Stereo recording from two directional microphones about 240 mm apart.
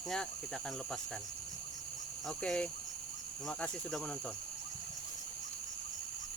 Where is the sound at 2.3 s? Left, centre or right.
Centre.